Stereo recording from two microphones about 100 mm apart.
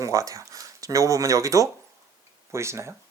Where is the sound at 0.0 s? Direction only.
35° right (ahead or behind).